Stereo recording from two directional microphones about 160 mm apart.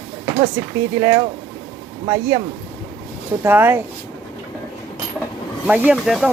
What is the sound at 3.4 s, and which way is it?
Speech, 15° right (ahead or behind).